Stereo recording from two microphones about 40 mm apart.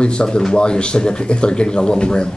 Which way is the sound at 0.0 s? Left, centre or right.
Left.